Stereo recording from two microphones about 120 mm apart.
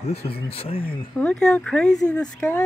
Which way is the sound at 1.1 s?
5° left (ahead or behind).